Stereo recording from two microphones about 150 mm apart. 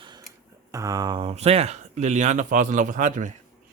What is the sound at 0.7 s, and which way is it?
Speech, 25° right (ahead or behind).